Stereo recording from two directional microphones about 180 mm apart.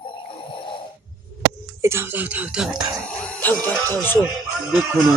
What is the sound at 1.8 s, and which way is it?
Speech, 15° right (ahead or behind).